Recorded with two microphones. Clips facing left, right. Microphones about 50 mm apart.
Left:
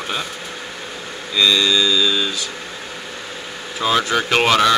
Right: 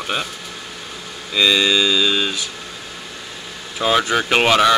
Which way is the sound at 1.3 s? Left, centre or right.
Right.